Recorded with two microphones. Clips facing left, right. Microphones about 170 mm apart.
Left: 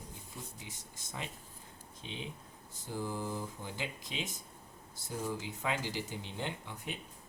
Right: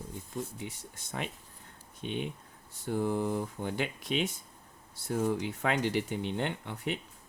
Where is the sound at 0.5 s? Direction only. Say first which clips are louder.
Right 8 dB; 65° right (ahead or behind).